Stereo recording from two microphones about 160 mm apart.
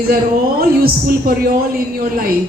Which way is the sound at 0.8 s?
70° right (ahead or behind).